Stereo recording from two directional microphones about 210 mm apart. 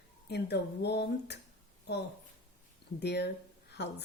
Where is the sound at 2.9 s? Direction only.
55° left (ahead or behind).